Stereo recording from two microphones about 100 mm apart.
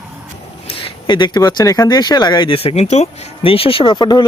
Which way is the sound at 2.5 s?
85° left.